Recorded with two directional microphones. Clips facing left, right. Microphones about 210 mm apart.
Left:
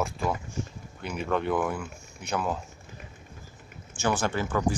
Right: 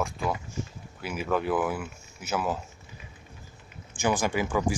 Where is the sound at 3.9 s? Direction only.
15° right (ahead or behind).